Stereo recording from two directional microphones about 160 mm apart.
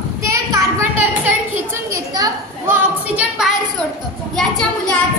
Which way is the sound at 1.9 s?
20° right (ahead or behind).